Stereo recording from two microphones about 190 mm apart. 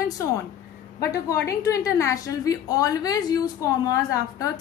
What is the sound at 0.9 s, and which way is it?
A woman's voice, 15° left (ahead or behind).